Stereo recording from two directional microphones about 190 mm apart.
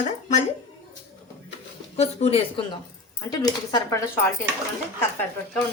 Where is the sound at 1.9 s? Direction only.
35° left (ahead or behind).